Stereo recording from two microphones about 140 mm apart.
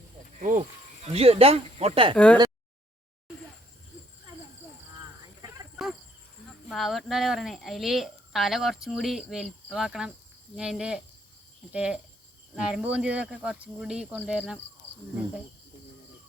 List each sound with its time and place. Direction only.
0.3 s speech: 65° right (ahead or behind)
0.6 s speech: 45° right (ahead or behind)
2.1 s speech: 10° left (ahead or behind)
6.7 s a woman's voice: centre (ahead or behind)